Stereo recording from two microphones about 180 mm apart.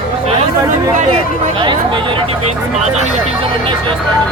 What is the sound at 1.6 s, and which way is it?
Speech, 25° right (ahead or behind).